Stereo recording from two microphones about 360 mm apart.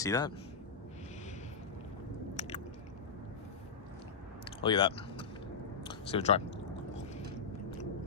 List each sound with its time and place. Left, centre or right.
0.0 s speech: centre
2.3 s biting: centre
4.6 s speech: centre